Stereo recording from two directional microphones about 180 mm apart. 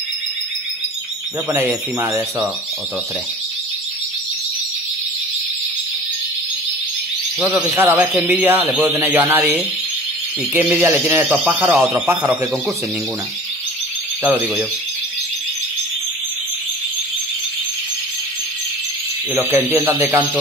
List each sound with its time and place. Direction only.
1.5 s speech: 15° right (ahead or behind)
7.3 s speech: 5° right (ahead or behind)
19.3 s speech: 10° right (ahead or behind)